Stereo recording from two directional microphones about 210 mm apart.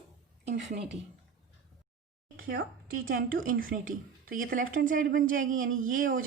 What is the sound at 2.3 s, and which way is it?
A woman's voice, 45° right (ahead or behind).